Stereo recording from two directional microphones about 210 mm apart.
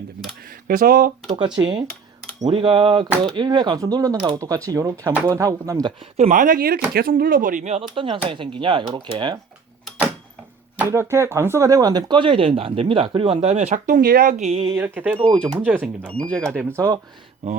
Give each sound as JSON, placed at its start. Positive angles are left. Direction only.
{"t": 0.4, "sound": "speech", "side_deg": -40}
{"t": 1.3, "sound": "speech", "side_deg": -20}
{"t": 6.0, "sound": "speech", "side_deg": -30}
{"t": 10.8, "sound": "speech", "side_deg": -10}
{"t": 14.8, "sound": "speech", "side_deg": -10}
{"t": 16.1, "sound": "speech", "side_deg": 5}
{"t": 16.5, "sound": "speech", "side_deg": -10}